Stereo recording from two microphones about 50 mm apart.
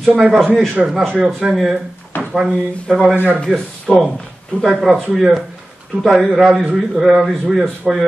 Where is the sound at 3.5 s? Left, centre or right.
Centre.